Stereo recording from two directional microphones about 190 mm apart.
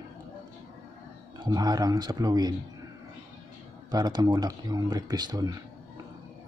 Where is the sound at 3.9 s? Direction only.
20° right (ahead or behind).